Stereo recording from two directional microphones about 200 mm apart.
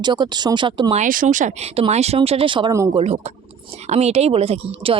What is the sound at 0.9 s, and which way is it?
Speech, 40° right (ahead or behind).